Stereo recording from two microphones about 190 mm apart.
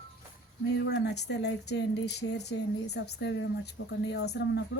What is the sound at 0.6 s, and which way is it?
Speech, 65° left (ahead or behind).